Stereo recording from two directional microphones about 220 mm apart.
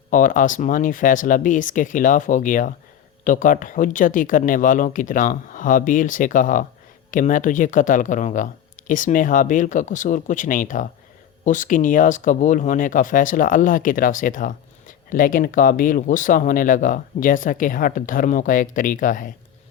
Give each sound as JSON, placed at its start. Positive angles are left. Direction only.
{"t": 0.1, "sound": "speech", "side_deg": 35}